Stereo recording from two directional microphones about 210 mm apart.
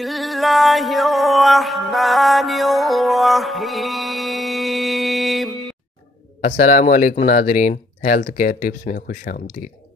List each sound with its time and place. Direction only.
0.0 s music: centre (ahead or behind)
6.4 s speech: 40° left (ahead or behind)